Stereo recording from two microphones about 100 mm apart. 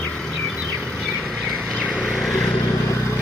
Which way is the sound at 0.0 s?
10° left (ahead or behind).